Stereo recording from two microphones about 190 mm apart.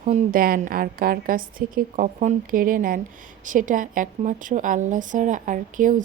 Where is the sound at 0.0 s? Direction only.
40° right (ahead or behind).